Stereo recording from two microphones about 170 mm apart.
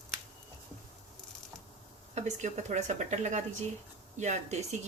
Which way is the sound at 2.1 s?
45° right (ahead or behind).